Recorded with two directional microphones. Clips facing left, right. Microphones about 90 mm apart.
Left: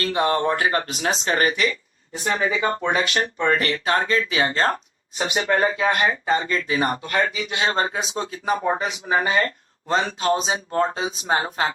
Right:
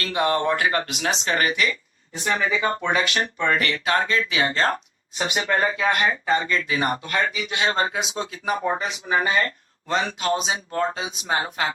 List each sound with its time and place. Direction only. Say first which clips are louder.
0.0 s speech: left 1 dB; 30° left (ahead or behind)